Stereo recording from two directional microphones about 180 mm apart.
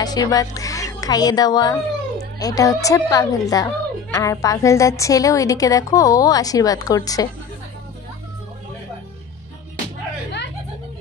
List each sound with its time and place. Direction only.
0.0 s a woman's voice: 20° left (ahead or behind)